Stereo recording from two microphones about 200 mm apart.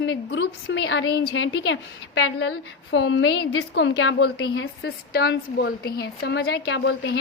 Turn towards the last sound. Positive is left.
turn(degrees=65)  # may be behind; listen again after turning